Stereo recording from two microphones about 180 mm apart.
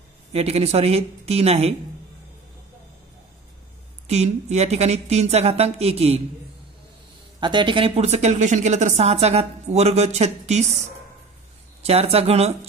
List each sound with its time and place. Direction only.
0.3 s a woman's voice: 35° right (ahead or behind)
4.1 s a woman's voice: 35° right (ahead or behind)
7.3 s a woman's voice: 25° right (ahead or behind)